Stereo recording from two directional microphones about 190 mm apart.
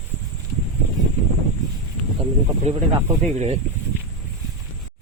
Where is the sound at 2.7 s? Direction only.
35° right (ahead or behind).